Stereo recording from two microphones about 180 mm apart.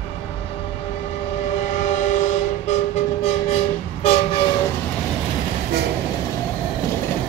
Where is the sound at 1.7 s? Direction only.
45° left (ahead or behind).